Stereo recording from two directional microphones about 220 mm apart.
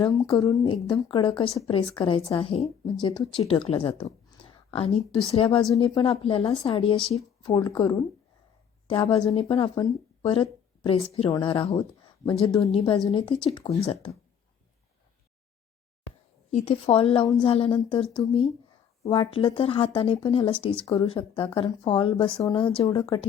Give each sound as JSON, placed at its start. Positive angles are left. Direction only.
{"t": 0.0, "sound": "speech", "side_deg": 20}
{"t": 16.5, "sound": "speech", "side_deg": 30}